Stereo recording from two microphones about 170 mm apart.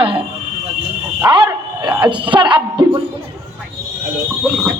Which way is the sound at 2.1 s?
30° right (ahead or behind).